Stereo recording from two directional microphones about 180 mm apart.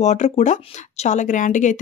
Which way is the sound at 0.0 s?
40° left (ahead or behind).